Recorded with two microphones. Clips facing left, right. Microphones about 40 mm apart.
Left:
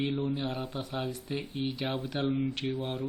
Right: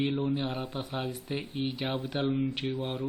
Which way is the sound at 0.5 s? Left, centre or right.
Centre.